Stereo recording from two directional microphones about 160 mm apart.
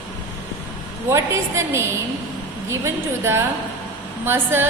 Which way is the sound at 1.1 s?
20° right (ahead or behind).